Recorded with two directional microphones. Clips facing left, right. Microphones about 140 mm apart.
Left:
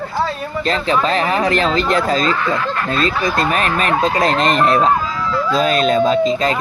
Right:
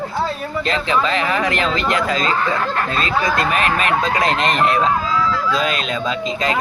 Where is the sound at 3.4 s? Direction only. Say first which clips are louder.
Left 1 dB; 40° left (ahead or behind).